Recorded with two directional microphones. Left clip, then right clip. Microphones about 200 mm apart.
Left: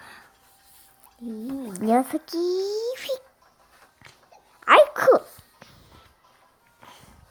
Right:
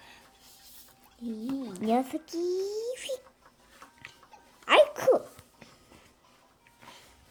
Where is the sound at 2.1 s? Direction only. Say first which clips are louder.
Left 6 dB; 20° left (ahead or behind).